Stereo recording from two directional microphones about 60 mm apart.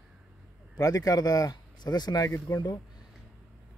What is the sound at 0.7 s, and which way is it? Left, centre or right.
Speech, left.